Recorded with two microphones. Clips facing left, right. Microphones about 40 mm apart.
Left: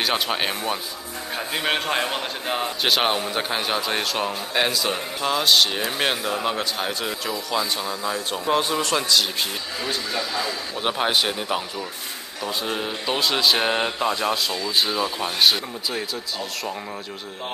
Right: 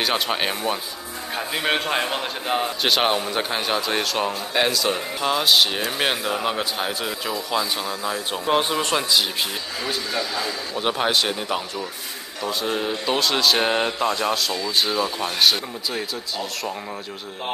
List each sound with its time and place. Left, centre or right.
0.0 s a man's voice: centre
8.5 s a man's voice: right
9.8 s a man's voice: centre